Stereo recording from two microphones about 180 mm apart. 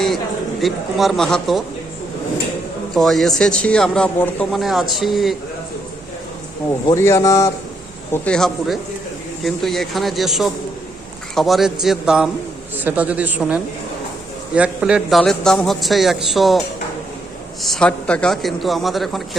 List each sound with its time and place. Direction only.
0.6 s speech: centre (ahead or behind)
2.9 s speech: centre (ahead or behind)
6.7 s a man's voice: 15° left (ahead or behind); by 19.4 s centre (ahead or behind)